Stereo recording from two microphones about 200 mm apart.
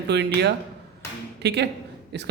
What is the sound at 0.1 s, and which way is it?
Speech, 55° right (ahead or behind).